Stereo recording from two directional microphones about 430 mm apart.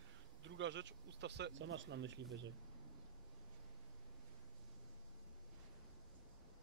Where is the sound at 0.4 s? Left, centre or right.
Right.